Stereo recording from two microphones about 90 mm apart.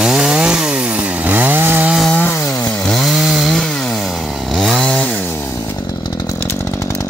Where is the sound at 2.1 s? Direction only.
20° left (ahead or behind).